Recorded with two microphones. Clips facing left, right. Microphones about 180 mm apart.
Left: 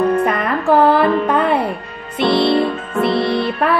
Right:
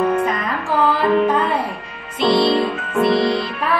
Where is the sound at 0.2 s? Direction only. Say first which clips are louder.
Left 4 dB; 60° left (ahead or behind).